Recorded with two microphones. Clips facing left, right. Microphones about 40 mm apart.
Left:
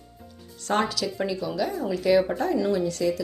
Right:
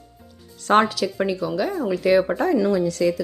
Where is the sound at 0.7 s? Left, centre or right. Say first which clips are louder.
Right 8 dB; right.